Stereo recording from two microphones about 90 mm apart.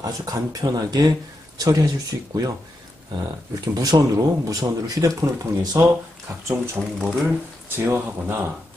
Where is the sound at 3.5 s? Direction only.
45° right (ahead or behind).